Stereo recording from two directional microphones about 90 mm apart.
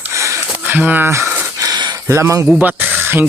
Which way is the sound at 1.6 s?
50° right (ahead or behind).